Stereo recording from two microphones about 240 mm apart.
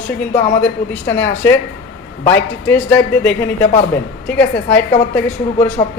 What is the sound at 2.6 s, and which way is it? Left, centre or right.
A woman's voice, centre.